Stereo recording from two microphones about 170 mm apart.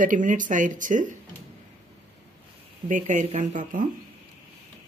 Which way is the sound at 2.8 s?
45° right (ahead or behind).